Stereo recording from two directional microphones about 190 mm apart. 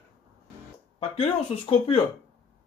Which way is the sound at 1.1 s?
30° left (ahead or behind).